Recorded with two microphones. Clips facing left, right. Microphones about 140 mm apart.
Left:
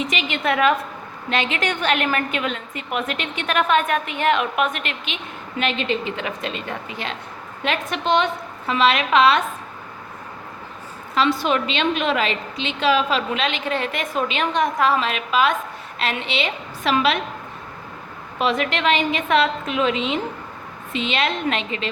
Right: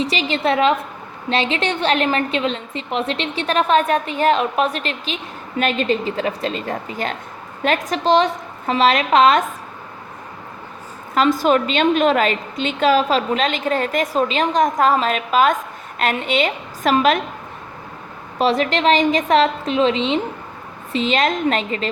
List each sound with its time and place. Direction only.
0.0 s a woman's voice: 35° right (ahead or behind)
11.1 s a woman's voice: 45° right (ahead or behind)
18.3 s a woman's voice: 35° right (ahead or behind)